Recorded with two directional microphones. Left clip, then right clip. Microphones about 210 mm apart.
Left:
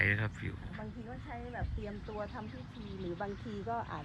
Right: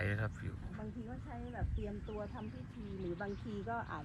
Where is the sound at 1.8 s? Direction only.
50° left (ahead or behind).